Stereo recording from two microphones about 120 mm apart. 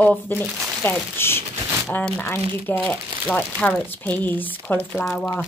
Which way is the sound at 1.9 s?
10° left (ahead or behind).